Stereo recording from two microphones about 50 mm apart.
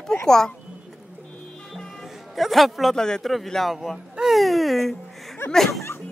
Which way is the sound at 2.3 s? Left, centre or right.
Centre.